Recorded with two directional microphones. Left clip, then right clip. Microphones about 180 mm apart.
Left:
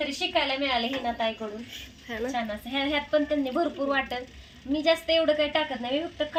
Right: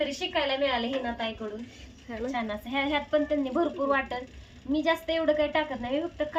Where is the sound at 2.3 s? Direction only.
15° right (ahead or behind).